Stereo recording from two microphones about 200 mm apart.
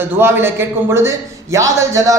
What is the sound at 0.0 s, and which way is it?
A man's voice, 10° right (ahead or behind).